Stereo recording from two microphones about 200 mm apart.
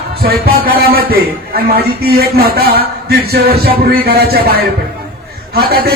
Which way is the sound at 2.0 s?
50° right (ahead or behind).